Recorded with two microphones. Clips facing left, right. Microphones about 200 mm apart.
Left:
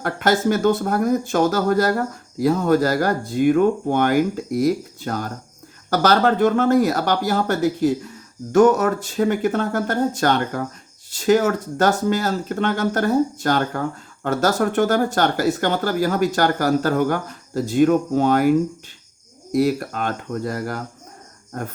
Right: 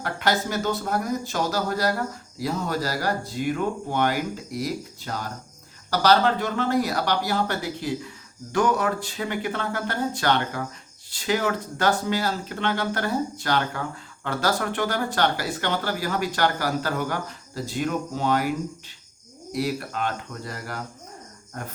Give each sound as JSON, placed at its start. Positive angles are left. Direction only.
{"t": 0.0, "sound": "speech", "side_deg": 50}
{"t": 19.5, "sound": "speech", "side_deg": 45}